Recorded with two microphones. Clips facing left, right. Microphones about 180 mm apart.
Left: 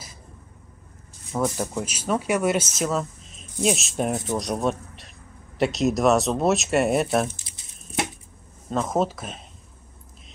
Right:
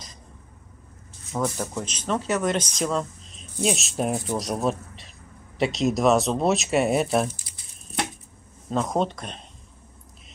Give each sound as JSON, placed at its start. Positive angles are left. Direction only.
{"t": 1.4, "sound": "speech", "side_deg": 10}
{"t": 7.2, "sound": "a sound", "side_deg": 25}
{"t": 8.6, "sound": "speech", "side_deg": 0}